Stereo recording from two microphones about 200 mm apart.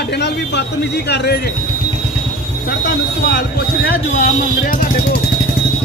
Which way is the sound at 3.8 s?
50° left (ahead or behind).